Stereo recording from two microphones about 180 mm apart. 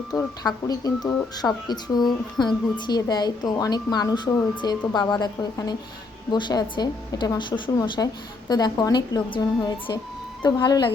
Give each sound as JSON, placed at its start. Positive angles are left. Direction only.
{"t": 0.4, "sound": "a woman's voice", "side_deg": 20}